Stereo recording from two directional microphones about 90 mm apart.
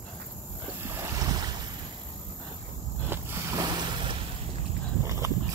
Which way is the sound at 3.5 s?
55° right (ahead or behind).